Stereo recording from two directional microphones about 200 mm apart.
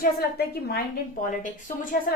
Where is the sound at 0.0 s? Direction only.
50° left (ahead or behind).